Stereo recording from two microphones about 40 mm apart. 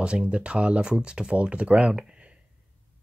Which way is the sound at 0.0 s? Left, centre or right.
Right.